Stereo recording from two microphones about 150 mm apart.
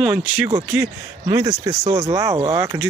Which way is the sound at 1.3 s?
25° right (ahead or behind).